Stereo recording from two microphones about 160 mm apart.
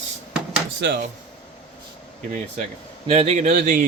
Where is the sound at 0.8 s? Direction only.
90° right.